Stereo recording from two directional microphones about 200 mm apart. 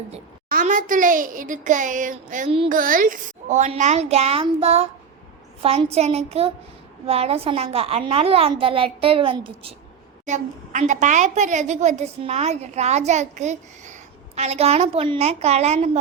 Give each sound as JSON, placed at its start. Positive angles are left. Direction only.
{"t": 0.5, "sound": "a woman's voice", "side_deg": -40}
{"t": 10.2, "sound": "a woman's voice", "side_deg": -35}